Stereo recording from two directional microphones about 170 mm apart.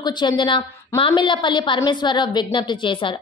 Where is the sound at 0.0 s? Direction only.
25° left (ahead or behind).